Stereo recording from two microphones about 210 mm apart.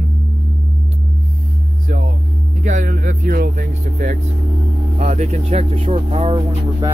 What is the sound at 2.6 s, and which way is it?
Speech, 40° right (ahead or behind).